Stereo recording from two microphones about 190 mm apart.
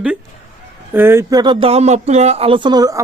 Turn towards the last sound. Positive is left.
turn(degrees=-20)  # may be behind; listen again after turning